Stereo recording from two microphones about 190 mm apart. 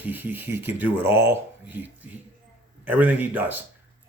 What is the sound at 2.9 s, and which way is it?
Speech, 10° right (ahead or behind).